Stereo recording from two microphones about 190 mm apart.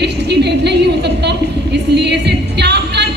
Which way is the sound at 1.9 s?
65° right (ahead or behind).